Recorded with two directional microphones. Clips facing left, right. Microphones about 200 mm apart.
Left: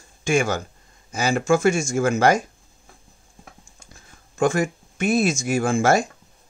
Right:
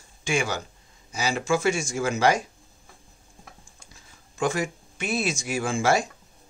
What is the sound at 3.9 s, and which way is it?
Speech, 50° left (ahead or behind).